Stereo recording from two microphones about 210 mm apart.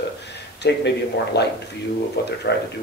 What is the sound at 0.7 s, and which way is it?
Speech, 55° left (ahead or behind).